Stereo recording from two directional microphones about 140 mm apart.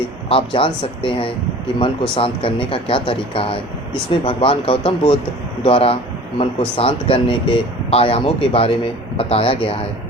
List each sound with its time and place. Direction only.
0.3 s speech: 40° left (ahead or behind)